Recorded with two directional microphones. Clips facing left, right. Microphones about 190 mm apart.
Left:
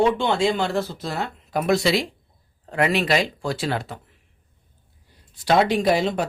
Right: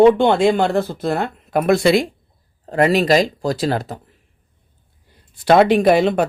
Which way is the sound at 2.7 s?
40° right (ahead or behind).